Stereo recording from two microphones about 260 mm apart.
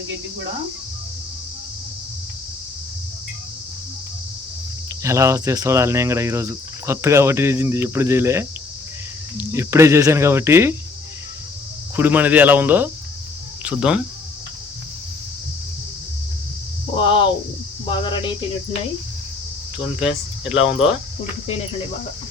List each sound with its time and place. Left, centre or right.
5.0 s speech: centre
11.9 s speech: centre
16.9 s a sound: centre
17.8 s cricket: centre
19.8 s speech: centre